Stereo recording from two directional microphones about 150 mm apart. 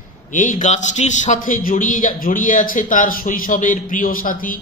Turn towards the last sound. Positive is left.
turn(degrees=65)  # may be behind; listen again after turning